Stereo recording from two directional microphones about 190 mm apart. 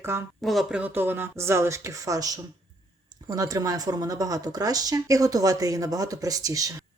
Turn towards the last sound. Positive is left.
turn(degrees=-15)  # may be behind; listen again after turning